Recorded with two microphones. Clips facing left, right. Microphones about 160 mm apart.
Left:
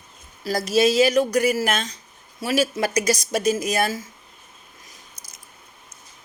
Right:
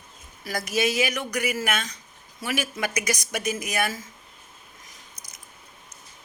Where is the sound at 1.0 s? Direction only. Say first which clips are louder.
Left 9 dB; 35° left (ahead or behind).